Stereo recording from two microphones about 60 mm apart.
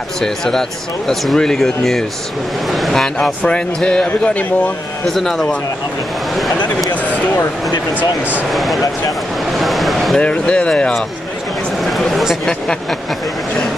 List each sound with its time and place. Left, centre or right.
0.2 s speech: centre; by 4.7 s left
5.0 s a man's voice: centre
8.0 s speech: right
8.5 s a man's voice: centre
9.5 s a sound: centre
10.1 s speech: centre
11.8 s a sound: centre